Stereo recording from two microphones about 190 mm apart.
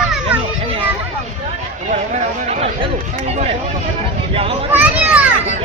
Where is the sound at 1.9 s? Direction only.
40° right (ahead or behind).